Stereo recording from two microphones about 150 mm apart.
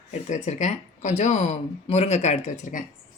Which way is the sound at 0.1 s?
50° left (ahead or behind).